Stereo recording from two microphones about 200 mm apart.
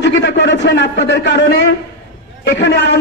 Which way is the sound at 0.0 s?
60° left (ahead or behind).